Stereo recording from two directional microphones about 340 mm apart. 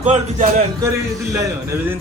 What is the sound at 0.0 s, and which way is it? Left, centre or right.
Speech, right.